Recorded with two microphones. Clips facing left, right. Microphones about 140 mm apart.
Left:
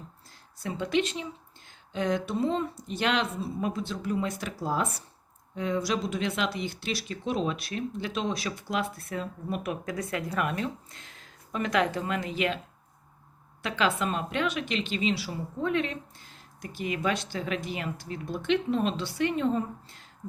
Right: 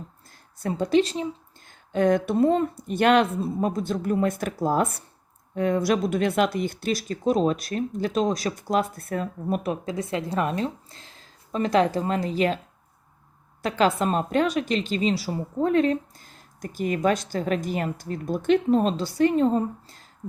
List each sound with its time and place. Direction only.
0.3 s a woman's voice: 45° right (ahead or behind)
9.6 s a woman's voice: 25° right (ahead or behind)
13.6 s a woman's voice: 40° right (ahead or behind)